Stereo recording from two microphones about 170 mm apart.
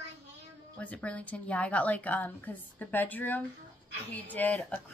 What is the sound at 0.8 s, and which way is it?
A woman's voice, 5° left (ahead or behind).